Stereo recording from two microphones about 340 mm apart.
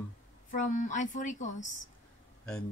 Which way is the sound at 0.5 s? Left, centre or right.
Left.